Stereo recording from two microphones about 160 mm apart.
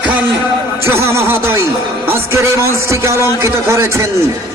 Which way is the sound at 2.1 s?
15° right (ahead or behind).